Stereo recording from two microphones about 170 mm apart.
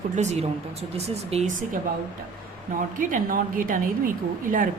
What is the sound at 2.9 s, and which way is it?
Speech, 55° right (ahead or behind).